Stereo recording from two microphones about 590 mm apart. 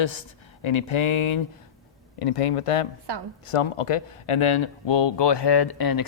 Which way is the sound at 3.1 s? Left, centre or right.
Right.